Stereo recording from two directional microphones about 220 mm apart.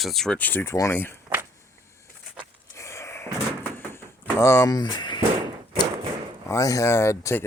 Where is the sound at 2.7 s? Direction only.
15° left (ahead or behind).